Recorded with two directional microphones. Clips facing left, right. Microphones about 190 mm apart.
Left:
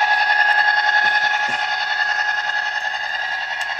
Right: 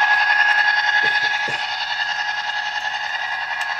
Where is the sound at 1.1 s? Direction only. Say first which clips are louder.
Left 4 dB; 60° left (ahead or behind).